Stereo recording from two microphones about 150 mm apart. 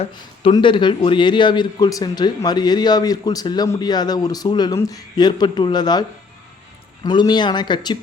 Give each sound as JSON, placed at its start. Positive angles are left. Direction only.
{"t": 0.1, "sound": "a man's voice", "side_deg": 30}